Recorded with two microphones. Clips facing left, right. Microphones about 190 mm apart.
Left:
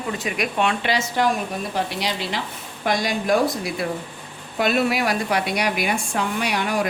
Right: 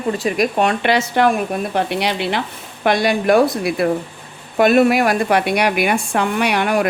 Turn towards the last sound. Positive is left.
turn(degrees=-65)  # may be behind; listen again after turning